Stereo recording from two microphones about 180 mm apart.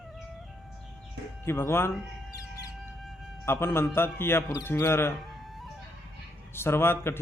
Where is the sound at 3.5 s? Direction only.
15° left (ahead or behind).